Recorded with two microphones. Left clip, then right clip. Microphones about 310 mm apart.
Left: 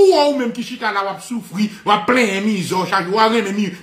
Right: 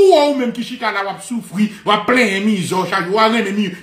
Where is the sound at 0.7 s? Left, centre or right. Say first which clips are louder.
Even; centre.